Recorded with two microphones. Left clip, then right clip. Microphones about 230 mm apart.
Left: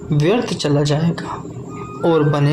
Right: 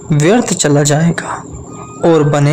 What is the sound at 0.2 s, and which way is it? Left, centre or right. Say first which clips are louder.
Speech: right 6 dB; right.